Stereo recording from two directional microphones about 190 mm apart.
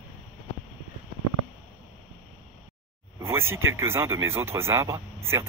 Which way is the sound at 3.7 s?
15° right (ahead or behind).